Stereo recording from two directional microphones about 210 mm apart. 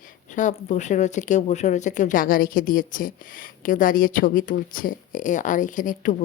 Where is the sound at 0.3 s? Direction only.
35° left (ahead or behind).